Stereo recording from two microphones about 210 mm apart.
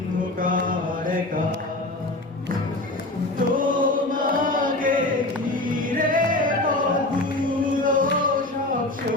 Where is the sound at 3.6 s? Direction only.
40° right (ahead or behind).